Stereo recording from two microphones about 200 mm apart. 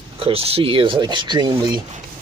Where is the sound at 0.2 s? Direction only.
30° right (ahead or behind).